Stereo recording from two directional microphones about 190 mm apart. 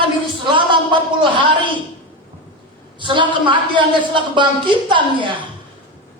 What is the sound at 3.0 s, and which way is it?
A woman's voice, 25° right (ahead or behind).